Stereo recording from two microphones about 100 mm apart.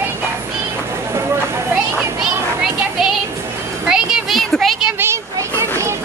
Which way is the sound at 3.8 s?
5° right (ahead or behind).